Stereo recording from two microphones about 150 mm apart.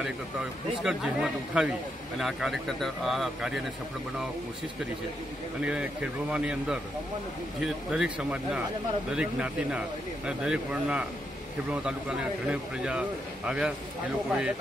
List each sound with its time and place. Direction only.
0.8 s speech: 5° right (ahead or behind)
5.6 s speech: 5° right (ahead or behind)
12.4 s speech: 5° right (ahead or behind)